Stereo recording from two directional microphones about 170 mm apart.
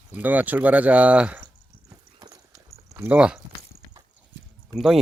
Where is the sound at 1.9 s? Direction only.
20° right (ahead or behind).